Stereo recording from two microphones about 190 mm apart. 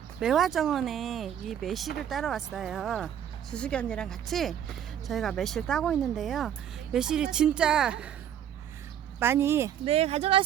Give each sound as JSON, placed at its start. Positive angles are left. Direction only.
{"t": 0.2, "sound": "speech", "side_deg": 0}
{"t": 9.1, "sound": "speech", "side_deg": -15}
{"t": 9.8, "sound": "speech", "side_deg": -30}